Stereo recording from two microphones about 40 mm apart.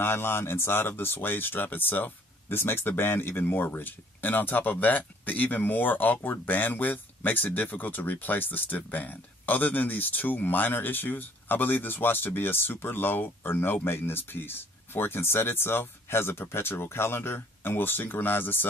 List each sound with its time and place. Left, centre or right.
0.0 s speech: left
2.8 s speech: left
3.1 s speech: left